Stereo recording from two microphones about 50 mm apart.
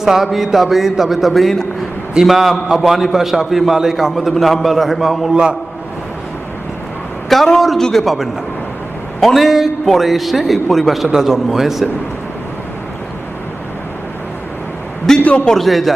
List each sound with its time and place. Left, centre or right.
0.0 s a man's voice: centre
5.3 s a man's voice: centre
7.3 s a sound: centre
7.8 s a man's voice: centre
8.0 s a man's voice: centre
15.2 s a man's voice: left
15.4 s a man's voice: centre